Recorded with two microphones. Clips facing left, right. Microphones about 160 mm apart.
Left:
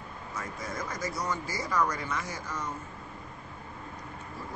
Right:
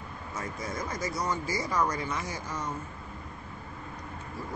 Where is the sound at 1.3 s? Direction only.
15° right (ahead or behind).